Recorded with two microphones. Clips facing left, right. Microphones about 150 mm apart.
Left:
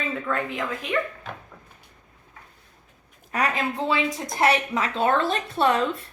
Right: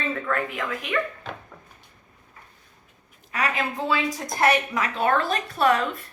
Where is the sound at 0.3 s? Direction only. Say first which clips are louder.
Even; 20° left (ahead or behind).